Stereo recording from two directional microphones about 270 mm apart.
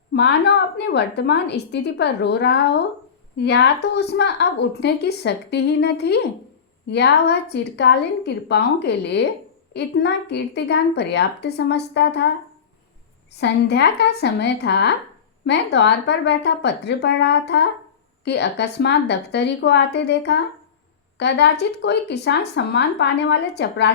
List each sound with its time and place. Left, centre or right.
0.1 s a woman's voice: left
13.4 s a woman's voice: left